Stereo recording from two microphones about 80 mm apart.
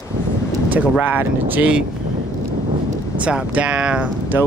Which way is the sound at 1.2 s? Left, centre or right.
Right.